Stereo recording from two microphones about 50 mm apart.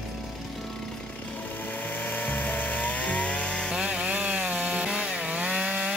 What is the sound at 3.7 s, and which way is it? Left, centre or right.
Wood, centre.